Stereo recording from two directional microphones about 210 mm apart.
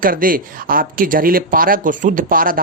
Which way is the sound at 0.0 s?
40° right (ahead or behind).